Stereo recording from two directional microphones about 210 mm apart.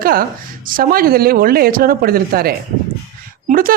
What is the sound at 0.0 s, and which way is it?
Speech, 45° right (ahead or behind).